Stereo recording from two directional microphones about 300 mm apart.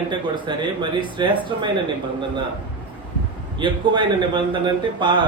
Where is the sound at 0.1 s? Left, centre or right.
Centre.